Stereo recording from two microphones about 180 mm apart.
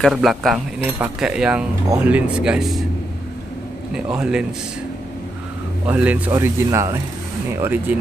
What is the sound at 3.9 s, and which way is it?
Speech, 5° right (ahead or behind).